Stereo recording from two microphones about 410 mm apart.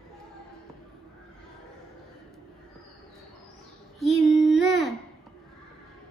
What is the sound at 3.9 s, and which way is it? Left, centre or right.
Child singing, centre.